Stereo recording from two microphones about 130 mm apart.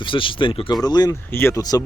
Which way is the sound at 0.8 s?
30° left (ahead or behind).